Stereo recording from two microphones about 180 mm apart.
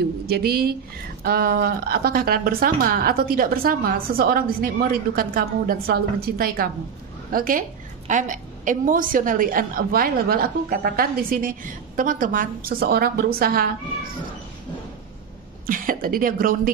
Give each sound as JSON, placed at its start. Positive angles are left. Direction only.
{"t": 0.3, "sound": "a woman's voice", "side_deg": -60}
{"t": 15.6, "sound": "a woman's voice", "side_deg": -50}